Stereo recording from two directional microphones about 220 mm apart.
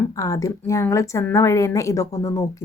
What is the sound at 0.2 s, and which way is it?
A woman's voice, 15° left (ahead or behind).